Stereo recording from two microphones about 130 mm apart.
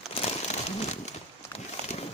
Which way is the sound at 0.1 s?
50° left (ahead or behind).